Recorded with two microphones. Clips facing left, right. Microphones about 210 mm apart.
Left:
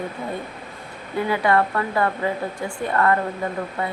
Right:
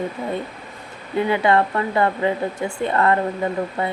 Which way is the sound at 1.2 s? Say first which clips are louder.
Right 2 dB; 25° right (ahead or behind).